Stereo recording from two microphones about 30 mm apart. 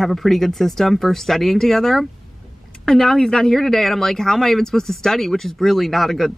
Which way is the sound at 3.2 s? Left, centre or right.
Left.